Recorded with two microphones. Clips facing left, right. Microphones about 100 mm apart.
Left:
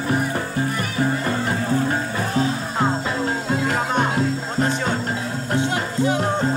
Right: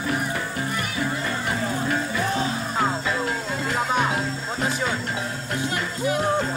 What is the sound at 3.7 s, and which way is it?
Music, centre (ahead or behind).